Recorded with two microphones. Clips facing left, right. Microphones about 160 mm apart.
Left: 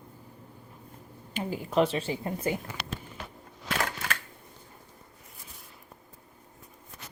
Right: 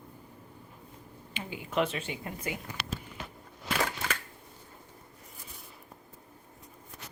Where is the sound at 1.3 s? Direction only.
40° left (ahead or behind).